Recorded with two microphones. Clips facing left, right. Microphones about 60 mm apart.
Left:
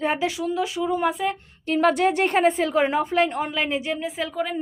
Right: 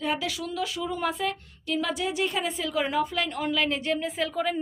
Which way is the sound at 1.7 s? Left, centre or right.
Left.